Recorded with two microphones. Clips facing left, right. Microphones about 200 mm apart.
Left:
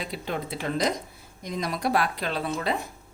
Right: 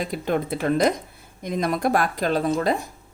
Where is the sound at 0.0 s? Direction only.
50° right (ahead or behind).